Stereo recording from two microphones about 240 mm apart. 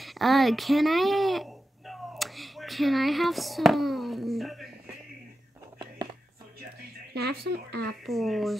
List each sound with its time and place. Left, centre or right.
0.0 s speech: centre
7.2 s speech: right
8.0 s speech: centre